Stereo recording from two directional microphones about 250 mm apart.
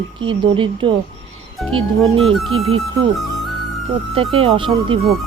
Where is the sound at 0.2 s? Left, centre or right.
Centre.